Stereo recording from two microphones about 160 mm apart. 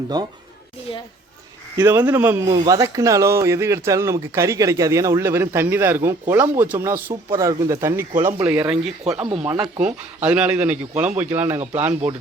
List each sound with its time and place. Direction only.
0.9 s a child's voice: 30° left (ahead or behind)
1.7 s speech: 15° right (ahead or behind)
9.2 s speech: 35° right (ahead or behind)
10.2 s speech: 10° right (ahead or behind)